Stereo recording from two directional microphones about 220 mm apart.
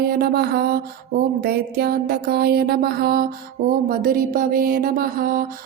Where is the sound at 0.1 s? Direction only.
45° right (ahead or behind).